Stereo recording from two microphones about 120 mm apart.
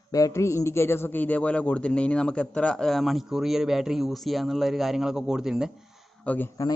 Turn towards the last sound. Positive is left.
turn(degrees=15)  # may be behind; listen again after turning